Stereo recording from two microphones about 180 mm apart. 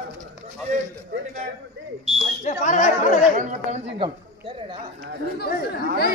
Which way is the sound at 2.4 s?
45° left (ahead or behind).